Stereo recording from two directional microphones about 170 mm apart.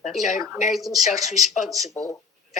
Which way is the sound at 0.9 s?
Centre (ahead or behind).